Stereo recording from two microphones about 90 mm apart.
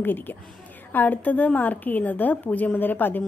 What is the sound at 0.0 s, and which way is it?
A woman's voice, 20° left (ahead or behind).